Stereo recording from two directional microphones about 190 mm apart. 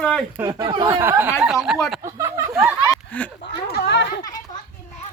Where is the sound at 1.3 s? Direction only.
Centre (ahead or behind).